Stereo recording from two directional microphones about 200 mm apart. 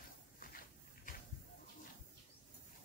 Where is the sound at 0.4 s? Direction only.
45° left (ahead or behind).